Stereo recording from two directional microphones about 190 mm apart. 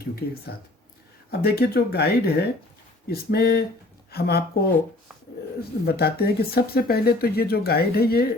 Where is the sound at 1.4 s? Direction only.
55° left (ahead or behind).